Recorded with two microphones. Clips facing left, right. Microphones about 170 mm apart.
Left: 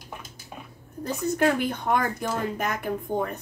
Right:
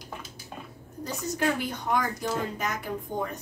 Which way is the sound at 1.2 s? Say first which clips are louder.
Left 5 dB; 55° left (ahead or behind).